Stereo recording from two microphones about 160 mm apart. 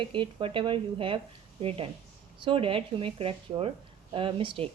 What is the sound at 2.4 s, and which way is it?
A woman's voice, 35° right (ahead or behind).